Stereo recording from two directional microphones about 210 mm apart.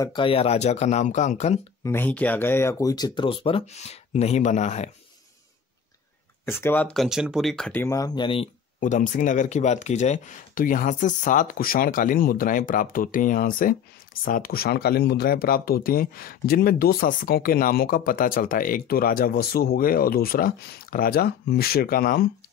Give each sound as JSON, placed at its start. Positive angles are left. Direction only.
{"t": 0.0, "sound": "speech", "side_deg": 20}
{"t": 1.9, "sound": "speech", "side_deg": 10}
{"t": 6.4, "sound": "speech", "side_deg": 10}
{"t": 8.7, "sound": "speech", "side_deg": 35}